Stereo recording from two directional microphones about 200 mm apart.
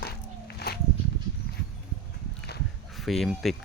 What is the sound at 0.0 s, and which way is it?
Walk, 55° left (ahead or behind).